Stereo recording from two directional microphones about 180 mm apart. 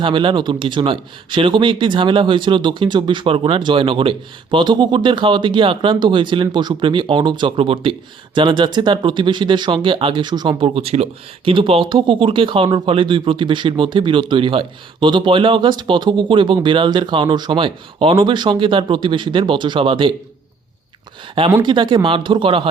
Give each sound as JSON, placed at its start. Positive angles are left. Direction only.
{"t": 0.0, "sound": "speech", "side_deg": -25}
{"t": 21.6, "sound": "speech", "side_deg": -25}